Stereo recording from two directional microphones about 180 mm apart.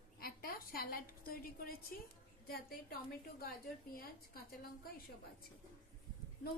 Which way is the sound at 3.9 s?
55° left (ahead or behind).